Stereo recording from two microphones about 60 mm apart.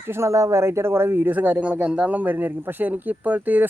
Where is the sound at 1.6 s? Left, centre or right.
Centre.